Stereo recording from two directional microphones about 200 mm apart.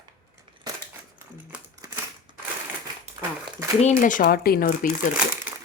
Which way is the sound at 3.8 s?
40° left (ahead or behind).